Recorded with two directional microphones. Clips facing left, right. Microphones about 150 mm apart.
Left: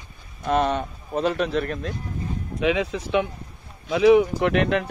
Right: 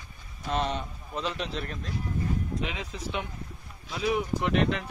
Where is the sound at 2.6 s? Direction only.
80° left.